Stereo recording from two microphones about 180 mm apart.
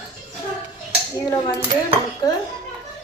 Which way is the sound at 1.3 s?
20° left (ahead or behind).